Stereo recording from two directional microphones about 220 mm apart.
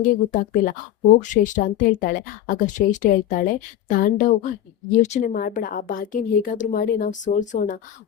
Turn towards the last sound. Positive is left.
turn(degrees=35)  # may be behind; listen again after turning